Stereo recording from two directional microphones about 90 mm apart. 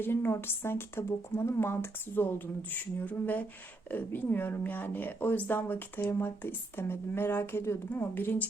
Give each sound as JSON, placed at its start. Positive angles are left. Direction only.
{"t": 0.0, "sound": "speech", "side_deg": 25}